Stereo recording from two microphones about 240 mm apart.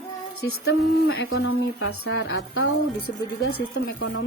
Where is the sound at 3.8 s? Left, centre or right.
Left.